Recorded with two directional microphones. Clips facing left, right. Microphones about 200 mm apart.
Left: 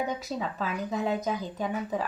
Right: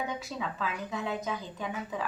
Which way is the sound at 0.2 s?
40° left (ahead or behind).